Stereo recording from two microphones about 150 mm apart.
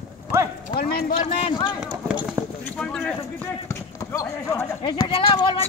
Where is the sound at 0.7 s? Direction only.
90° left.